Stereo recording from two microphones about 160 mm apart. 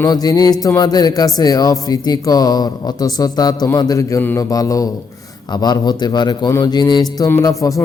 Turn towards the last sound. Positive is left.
turn(degrees=20)  # may be behind; listen again after turning